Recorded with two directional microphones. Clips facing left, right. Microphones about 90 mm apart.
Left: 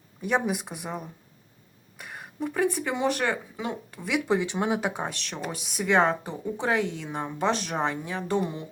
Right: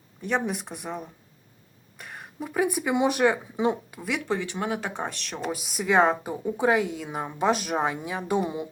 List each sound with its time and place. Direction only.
0.2 s speech: 5° left (ahead or behind); by 3.8 s 20° right (ahead or behind)
3.9 s speech: centre (ahead or behind)
4.3 s speech: 20° left (ahead or behind)
4.9 s speech: centre (ahead or behind)